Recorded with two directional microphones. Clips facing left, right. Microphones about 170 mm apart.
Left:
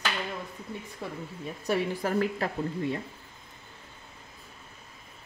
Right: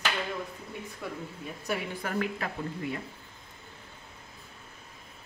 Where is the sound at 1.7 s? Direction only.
35° left (ahead or behind).